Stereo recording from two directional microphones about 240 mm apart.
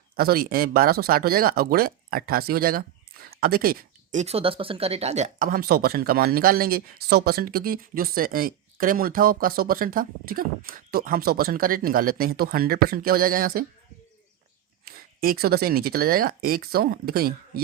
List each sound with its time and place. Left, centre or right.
0.2 s speech: right
14.8 s speech: right